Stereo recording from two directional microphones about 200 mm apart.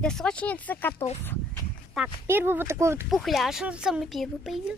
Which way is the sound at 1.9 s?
10° right (ahead or behind).